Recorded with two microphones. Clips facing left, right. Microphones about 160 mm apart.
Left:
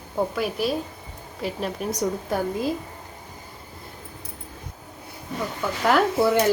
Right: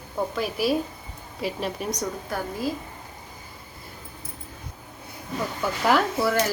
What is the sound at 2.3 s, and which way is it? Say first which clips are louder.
Speech: left 2 dB; 20° left (ahead or behind).